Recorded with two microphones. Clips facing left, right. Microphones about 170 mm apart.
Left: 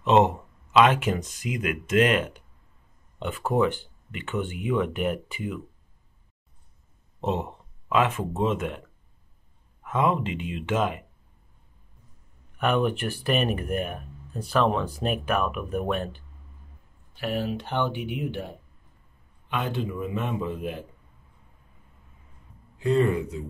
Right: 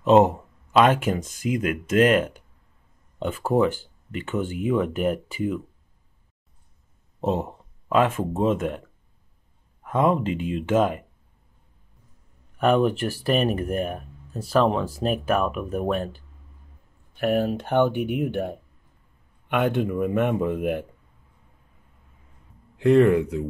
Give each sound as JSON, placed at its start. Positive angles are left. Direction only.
{"t": 0.0, "sound": "speech", "side_deg": -40}
{"t": 7.2, "sound": "speech", "side_deg": -40}
{"t": 9.8, "sound": "speech", "side_deg": -40}
{"t": 12.5, "sound": "speech", "side_deg": -35}
{"t": 17.2, "sound": "speech", "side_deg": -55}
{"t": 22.8, "sound": "speech", "side_deg": -75}